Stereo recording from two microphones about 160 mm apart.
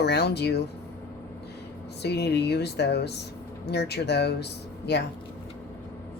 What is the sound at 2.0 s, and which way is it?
Speech, 90° left.